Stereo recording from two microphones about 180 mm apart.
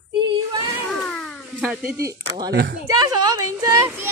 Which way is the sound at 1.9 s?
20° right (ahead or behind).